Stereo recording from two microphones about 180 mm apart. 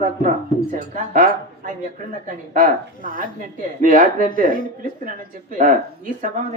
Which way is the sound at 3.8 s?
50° right (ahead or behind).